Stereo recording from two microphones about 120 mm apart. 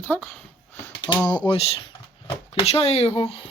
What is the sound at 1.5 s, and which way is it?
Speech, 55° left (ahead or behind).